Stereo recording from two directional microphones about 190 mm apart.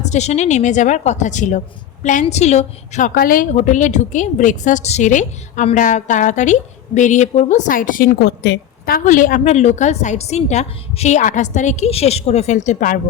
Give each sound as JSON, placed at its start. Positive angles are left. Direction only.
{"t": 0.0, "sound": "a woman's voice", "side_deg": 35}